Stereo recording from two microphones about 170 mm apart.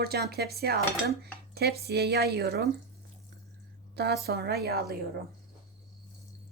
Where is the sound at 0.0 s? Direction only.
65° right (ahead or behind).